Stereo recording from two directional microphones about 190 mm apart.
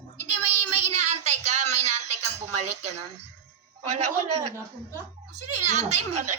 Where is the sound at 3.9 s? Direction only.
35° right (ahead or behind).